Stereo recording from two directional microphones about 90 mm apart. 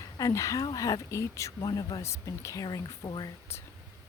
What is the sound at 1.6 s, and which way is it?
Speech, 45° left (ahead or behind).